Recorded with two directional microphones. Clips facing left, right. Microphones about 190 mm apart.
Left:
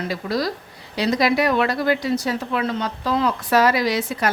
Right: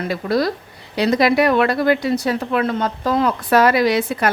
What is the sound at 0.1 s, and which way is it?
Speech, 55° right (ahead or behind).